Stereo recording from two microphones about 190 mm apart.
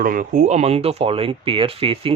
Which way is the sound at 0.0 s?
50° right (ahead or behind).